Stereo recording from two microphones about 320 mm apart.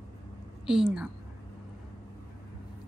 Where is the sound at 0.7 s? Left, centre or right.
Centre.